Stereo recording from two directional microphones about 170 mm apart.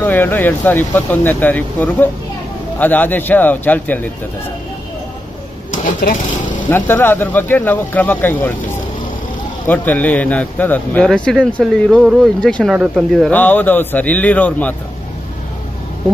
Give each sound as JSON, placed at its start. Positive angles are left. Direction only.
{"t": 0.0, "sound": "speech", "side_deg": 10}
{"t": 5.7, "sound": "sewing machine", "side_deg": 50}
{"t": 6.7, "sound": "speech", "side_deg": 10}
{"t": 9.7, "sound": "speech", "side_deg": 10}